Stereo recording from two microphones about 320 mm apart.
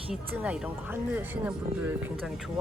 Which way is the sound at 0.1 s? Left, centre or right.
Centre.